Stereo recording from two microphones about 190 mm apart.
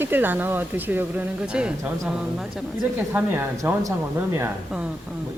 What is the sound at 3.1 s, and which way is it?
Speech, 15° right (ahead or behind).